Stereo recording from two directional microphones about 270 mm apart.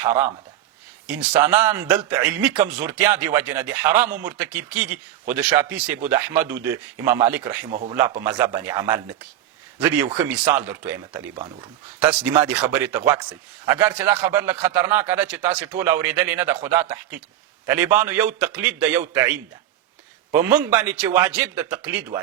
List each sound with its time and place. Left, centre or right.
1.0 s a man's voice: centre